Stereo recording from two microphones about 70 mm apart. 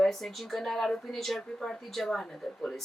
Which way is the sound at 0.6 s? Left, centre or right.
Centre.